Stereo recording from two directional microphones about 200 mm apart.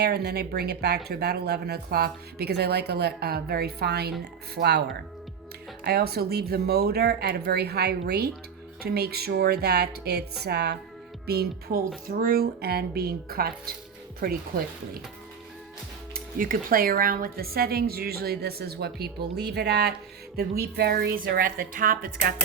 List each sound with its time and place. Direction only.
0.0 s speech: 55° right (ahead or behind)
16.1 s speech: 45° right (ahead or behind)